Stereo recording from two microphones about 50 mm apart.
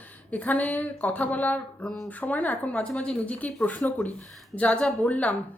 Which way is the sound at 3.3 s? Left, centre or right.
Left.